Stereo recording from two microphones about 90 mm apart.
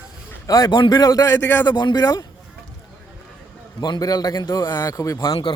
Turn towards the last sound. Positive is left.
turn(degrees=35)  # may be behind; listen again after turning